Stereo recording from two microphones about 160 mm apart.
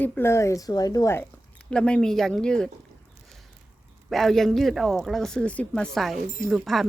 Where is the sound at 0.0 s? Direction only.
10° left (ahead or behind).